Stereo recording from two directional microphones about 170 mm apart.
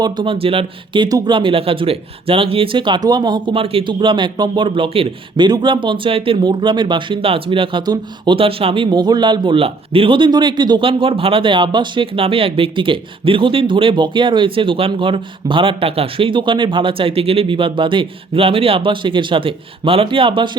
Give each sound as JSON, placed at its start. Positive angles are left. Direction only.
{"t": 0.0, "sound": "speech", "side_deg": -30}